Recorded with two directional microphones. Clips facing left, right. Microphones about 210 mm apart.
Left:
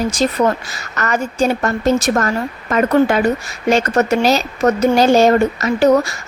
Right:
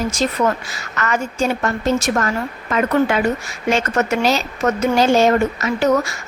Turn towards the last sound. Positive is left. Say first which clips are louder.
# left 4 dB
turn(degrees=35)  # may be behind; listen again after turning